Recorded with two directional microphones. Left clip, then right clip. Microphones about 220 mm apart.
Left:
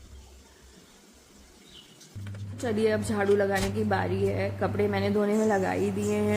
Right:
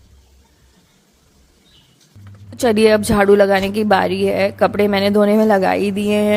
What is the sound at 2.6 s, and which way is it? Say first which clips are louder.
A woman's voice: right 14 dB; 45° right (ahead or behind).